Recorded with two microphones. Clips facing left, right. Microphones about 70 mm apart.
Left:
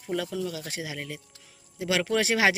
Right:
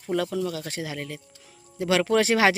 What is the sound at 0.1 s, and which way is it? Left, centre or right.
Speech, centre.